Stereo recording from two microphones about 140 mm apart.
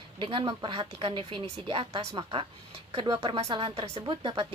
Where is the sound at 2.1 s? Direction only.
30° right (ahead or behind).